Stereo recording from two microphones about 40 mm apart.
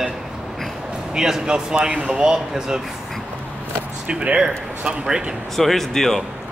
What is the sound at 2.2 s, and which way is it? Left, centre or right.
Speech, centre.